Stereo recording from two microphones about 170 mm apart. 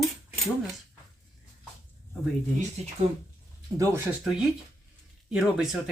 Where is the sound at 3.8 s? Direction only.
20° right (ahead or behind).